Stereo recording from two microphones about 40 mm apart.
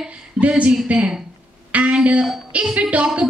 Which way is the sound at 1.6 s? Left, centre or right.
Right.